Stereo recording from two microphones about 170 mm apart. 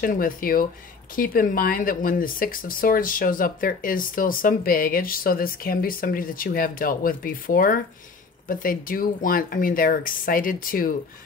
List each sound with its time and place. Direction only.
0.0 s speech: 55° left (ahead or behind)